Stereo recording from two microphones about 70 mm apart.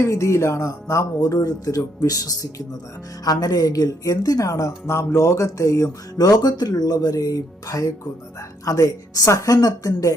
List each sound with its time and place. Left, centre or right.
0.0 s speech: left
6.1 s speech: left